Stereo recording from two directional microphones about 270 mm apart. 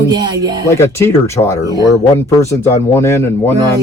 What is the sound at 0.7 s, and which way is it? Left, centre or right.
Speech, centre.